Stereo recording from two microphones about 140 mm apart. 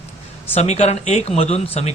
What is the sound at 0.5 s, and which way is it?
Speech, 50° left (ahead or behind).